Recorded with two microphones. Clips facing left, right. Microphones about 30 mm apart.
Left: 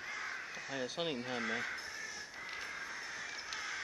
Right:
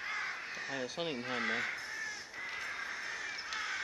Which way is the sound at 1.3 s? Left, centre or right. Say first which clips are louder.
Right 5 dB; right.